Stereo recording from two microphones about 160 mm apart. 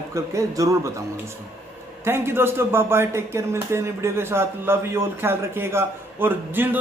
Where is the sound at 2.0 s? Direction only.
15° right (ahead or behind).